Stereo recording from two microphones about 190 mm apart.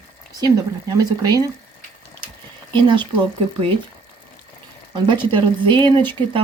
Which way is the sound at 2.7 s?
25° right (ahead or behind).